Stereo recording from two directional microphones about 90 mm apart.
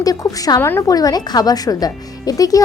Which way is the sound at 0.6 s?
30° left (ahead or behind).